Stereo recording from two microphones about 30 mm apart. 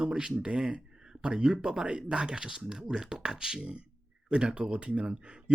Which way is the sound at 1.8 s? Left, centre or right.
Right.